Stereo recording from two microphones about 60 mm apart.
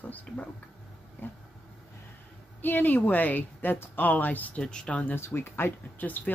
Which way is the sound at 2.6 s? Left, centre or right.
Left.